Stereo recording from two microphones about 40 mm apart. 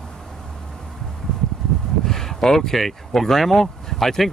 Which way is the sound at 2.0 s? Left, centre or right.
Centre.